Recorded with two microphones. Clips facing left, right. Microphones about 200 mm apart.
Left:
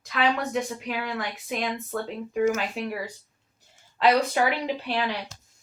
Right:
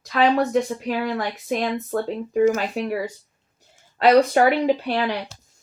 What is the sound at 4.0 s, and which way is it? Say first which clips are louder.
Speech: right 6 dB; 45° right (ahead or behind).